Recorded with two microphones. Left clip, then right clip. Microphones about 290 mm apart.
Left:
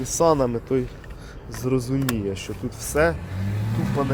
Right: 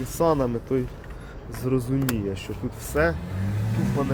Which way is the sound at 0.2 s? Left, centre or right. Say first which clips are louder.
Left 3 dB; centre.